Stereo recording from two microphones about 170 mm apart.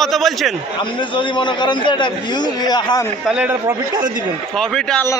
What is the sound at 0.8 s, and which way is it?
A man's voice, 30° left (ahead or behind).